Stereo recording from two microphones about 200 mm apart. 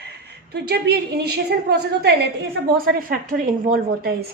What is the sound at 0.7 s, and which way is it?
A woman's voice, 55° right (ahead or behind).